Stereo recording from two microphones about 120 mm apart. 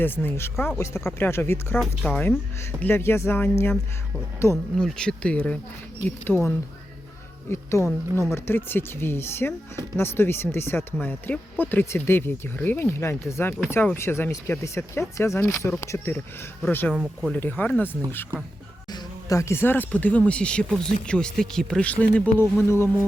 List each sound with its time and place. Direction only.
0.0 s speech: 15° left (ahead or behind)
2.0 s speech: 10° left (ahead or behind)
2.8 s speech: 20° left (ahead or behind)
4.5 s speech: 5° left (ahead or behind)
16.9 s speech: 5° right (ahead or behind)
17.3 s speech: 15° left (ahead or behind)
18.9 s speech: 30° left (ahead or behind); by 22.2 s 10° left (ahead or behind)
22.4 s speech: 20° left (ahead or behind)